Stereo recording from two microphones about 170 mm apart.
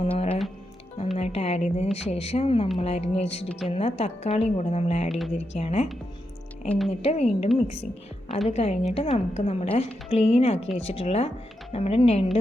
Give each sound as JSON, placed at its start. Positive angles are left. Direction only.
{"t": 0.0, "sound": "music", "side_deg": 35}
{"t": 1.1, "sound": "a woman's voice", "side_deg": 35}
{"t": 5.0, "sound": "speech", "side_deg": 0}
{"t": 5.3, "sound": "a woman's voice", "side_deg": 40}
{"t": 6.7, "sound": "speech", "side_deg": 0}
{"t": 7.0, "sound": "a woman's voice", "side_deg": 40}
{"t": 8.4, "sound": "a woman's voice", "side_deg": 40}